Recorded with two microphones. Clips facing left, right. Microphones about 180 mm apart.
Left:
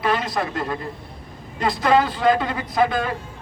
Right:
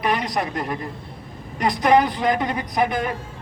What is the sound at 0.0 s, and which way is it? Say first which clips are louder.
A man's voice: even; 20° right (ahead or behind).